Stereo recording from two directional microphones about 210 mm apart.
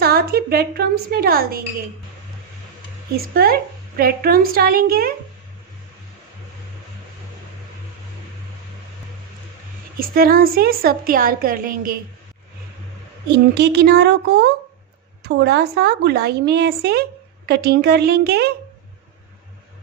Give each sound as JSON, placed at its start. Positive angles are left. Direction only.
{"t": 0.0, "sound": "a woman's voice", "side_deg": -50}
{"t": 3.3, "sound": "a woman's voice", "side_deg": -45}
{"t": 10.0, "sound": "a woman's voice", "side_deg": -45}
{"t": 13.2, "sound": "a woman's voice", "side_deg": -50}